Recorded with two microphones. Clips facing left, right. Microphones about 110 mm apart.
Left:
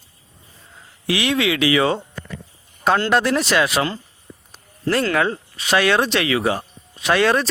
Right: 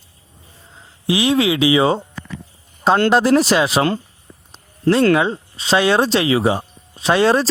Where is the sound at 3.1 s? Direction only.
35° right (ahead or behind).